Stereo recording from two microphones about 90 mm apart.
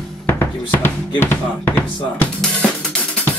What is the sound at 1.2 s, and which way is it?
Speech, 25° left (ahead or behind).